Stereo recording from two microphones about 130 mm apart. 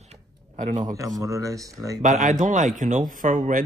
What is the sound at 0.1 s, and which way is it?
Tick-tock, 65° right (ahead or behind).